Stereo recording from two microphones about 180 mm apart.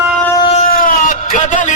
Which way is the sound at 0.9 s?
50° left (ahead or behind).